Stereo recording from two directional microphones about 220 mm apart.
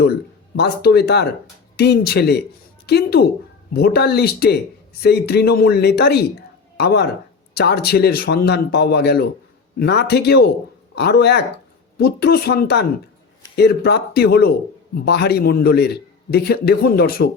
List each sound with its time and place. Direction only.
0.5 s a man's voice: 45° left (ahead or behind)